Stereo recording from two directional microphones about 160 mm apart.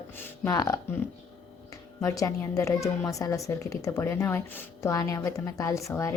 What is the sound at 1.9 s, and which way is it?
A woman's voice, 20° left (ahead or behind).